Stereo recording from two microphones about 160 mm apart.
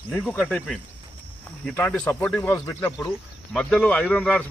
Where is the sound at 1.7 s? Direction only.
10° left (ahead or behind).